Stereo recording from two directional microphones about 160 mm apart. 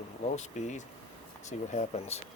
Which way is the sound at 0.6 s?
50° left (ahead or behind).